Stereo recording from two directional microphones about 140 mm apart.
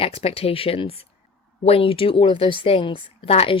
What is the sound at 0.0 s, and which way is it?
Speech, 45° left (ahead or behind).